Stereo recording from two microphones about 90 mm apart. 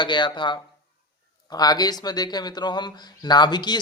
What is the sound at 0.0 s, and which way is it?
Speech, 60° left (ahead or behind).